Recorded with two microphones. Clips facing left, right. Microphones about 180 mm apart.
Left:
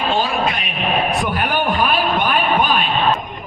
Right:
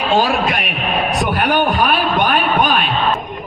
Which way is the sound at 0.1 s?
90° right.